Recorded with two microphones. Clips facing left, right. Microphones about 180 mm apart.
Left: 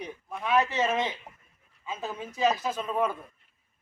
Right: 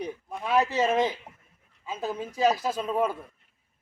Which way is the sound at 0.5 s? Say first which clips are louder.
Right 2 dB; 35° right (ahead or behind).